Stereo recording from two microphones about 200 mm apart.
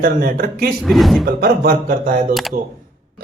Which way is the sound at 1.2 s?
45° right (ahead or behind).